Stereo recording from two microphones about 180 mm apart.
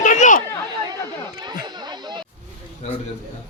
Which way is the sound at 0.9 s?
25° right (ahead or behind).